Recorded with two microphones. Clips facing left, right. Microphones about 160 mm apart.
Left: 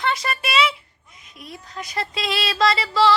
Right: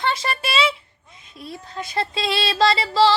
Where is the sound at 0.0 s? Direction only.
25° right (ahead or behind).